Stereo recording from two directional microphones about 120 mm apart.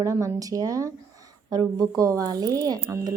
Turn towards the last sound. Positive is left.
turn(degrees=-30)  # may be behind; listen again after turning